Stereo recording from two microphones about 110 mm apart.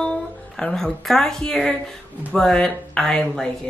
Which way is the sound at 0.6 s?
5° left (ahead or behind).